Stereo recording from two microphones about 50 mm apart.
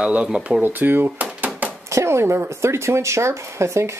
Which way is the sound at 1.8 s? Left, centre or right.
Right.